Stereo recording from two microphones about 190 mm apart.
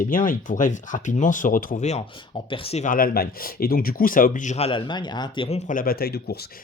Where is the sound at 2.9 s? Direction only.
50° left (ahead or behind); by 5.6 s 25° left (ahead or behind).